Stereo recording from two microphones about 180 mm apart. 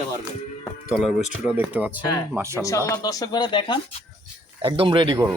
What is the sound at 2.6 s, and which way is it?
A man's voice, 20° left (ahead or behind).